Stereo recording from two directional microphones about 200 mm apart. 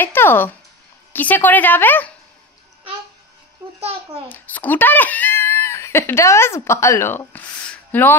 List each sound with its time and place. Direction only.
0.0 s a woman's voice: 10° left (ahead or behind)
3.8 s a child's voice: 30° right (ahead or behind)
4.3 s speech: 10° left (ahead or behind)